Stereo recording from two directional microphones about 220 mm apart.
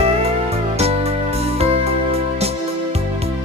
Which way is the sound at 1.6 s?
30° right (ahead or behind).